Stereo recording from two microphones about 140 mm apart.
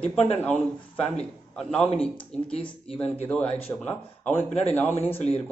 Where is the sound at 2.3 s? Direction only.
50° left (ahead or behind).